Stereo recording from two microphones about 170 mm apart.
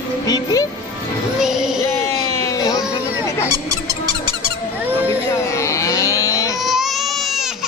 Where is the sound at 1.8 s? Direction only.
20° left (ahead or behind).